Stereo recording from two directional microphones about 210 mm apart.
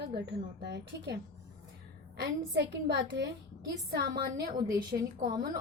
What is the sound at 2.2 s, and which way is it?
A woman's voice, 55° right (ahead or behind).